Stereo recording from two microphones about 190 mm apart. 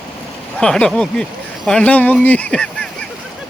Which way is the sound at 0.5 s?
5° left (ahead or behind).